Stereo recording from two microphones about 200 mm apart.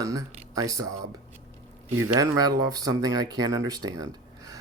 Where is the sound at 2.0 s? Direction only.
20° right (ahead or behind).